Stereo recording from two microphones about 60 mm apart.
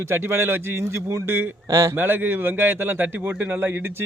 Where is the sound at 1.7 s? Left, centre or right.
Right.